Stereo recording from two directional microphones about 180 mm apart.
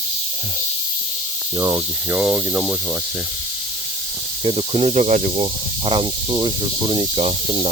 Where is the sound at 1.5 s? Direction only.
20° right (ahead or behind).